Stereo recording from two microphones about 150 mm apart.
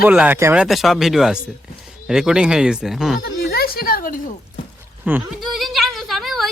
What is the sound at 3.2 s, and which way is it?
A woman's voice, 90° left.